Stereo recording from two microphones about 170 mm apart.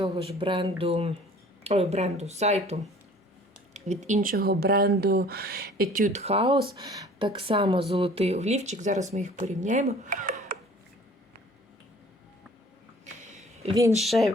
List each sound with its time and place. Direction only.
0.0 s speech: 35° right (ahead or behind)
3.8 s speech: 45° right (ahead or behind); by 6.0 s 60° right (ahead or behind)
6.1 s speech: 40° right (ahead or behind)
10.1 s a sound: 50° right (ahead or behind)
13.2 s a sound: 40° right (ahead or behind)
13.9 s speech: centre (ahead or behind)